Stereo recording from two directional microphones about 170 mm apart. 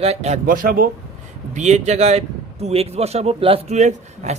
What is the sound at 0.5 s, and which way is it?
Speech, 60° right (ahead or behind).